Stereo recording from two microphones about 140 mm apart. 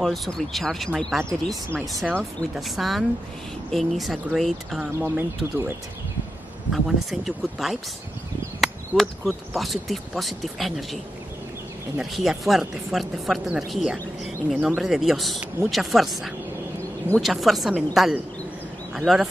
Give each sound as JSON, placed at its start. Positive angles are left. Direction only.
{"t": 0.0, "sound": "speech", "side_deg": 0}
{"t": 4.9, "sound": "speech", "side_deg": -15}
{"t": 6.7, "sound": "speech", "side_deg": 0}
{"t": 8.5, "sound": "chop", "side_deg": 0}
{"t": 9.6, "sound": "speech", "side_deg": 0}
{"t": 12.0, "sound": "speech", "side_deg": 0}